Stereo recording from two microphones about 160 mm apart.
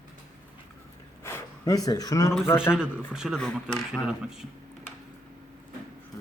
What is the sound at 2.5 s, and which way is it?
Speech, 15° left (ahead or behind).